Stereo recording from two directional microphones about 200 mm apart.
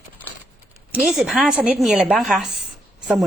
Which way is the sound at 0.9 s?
5° right (ahead or behind).